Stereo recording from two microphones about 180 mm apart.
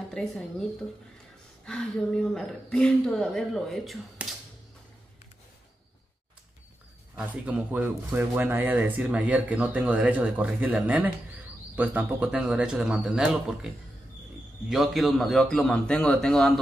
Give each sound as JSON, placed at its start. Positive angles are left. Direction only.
{"t": 0.1, "sound": "a woman's voice", "side_deg": 5}
{"t": 1.7, "sound": "a woman's voice", "side_deg": 5}
{"t": 7.2, "sound": "a woman's voice", "side_deg": -5}